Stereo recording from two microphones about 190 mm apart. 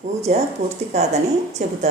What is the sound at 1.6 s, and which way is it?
Speech, 35° right (ahead or behind).